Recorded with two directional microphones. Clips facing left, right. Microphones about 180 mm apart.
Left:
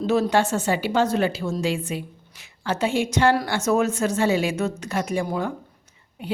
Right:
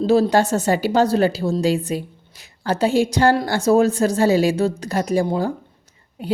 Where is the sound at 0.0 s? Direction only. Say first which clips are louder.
Right 4 dB; 35° right (ahead or behind).